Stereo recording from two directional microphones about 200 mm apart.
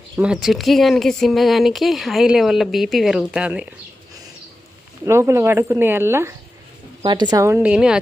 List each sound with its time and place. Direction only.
0.2 s speech: 5° right (ahead or behind)
5.0 s speech: 15° right (ahead or behind)